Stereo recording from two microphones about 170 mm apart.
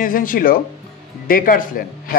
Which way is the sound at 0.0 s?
55° left (ahead or behind).